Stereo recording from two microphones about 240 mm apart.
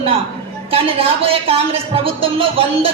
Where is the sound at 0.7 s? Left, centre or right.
Right.